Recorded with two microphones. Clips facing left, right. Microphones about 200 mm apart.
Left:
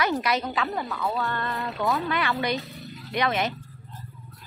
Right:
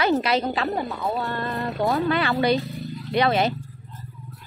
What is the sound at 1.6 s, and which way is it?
Speech, 50° right (ahead or behind).